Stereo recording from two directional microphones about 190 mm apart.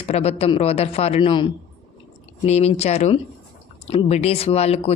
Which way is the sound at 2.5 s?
35° left (ahead or behind).